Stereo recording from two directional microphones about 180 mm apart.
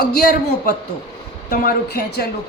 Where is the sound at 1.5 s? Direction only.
60° left (ahead or behind).